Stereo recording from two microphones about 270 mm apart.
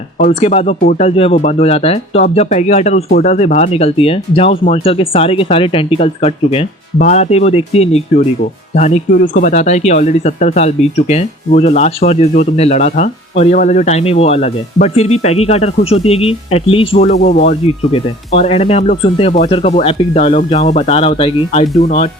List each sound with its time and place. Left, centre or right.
0.2 s speech: left